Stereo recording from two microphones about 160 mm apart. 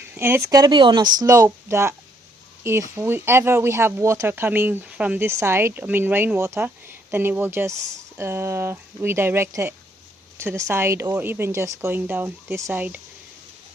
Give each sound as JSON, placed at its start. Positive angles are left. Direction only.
{"t": 0.1, "sound": "speech", "side_deg": -15}